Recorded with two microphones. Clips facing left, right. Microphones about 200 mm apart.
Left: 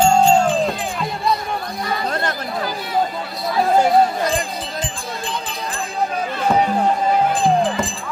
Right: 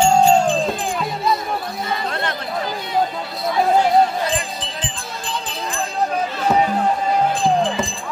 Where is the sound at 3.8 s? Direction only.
45° left (ahead or behind).